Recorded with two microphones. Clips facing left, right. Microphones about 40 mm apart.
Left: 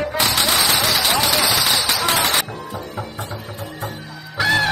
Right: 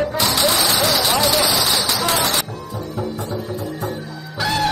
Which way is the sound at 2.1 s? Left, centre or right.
Left.